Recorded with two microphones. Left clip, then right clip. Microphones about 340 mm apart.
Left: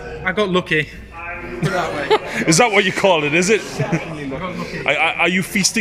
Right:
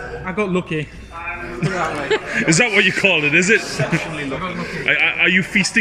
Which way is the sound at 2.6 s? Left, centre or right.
Left.